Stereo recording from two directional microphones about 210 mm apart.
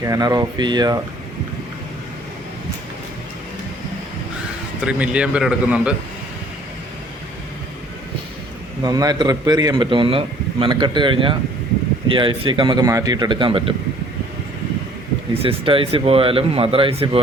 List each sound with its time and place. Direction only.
0.0 s a man's voice: 15° right (ahead or behind)
4.8 s a man's voice: 5° right (ahead or behind)
8.8 s a man's voice: 20° right (ahead or behind)
15.4 s a man's voice: 25° right (ahead or behind)